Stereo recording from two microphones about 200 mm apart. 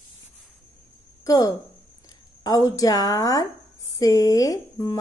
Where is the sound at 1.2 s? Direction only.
20° left (ahead or behind).